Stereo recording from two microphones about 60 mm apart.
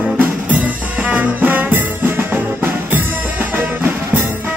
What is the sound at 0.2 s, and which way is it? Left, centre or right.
Music, right.